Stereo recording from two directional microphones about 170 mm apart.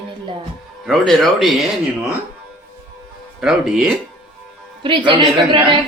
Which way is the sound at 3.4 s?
5° right (ahead or behind).